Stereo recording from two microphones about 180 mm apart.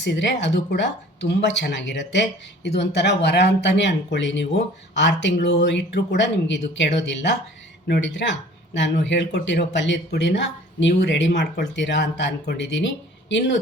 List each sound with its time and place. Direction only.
0.0 s speech: 75° left (ahead or behind)
2.6 s speech: 70° left (ahead or behind); by 13.6 s 85° left